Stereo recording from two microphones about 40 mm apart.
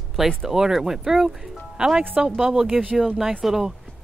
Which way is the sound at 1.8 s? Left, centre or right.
Right.